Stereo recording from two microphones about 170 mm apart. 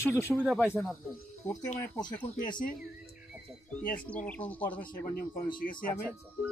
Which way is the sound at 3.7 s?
5° left (ahead or behind).